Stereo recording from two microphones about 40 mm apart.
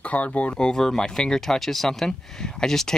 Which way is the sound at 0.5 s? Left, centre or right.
Left.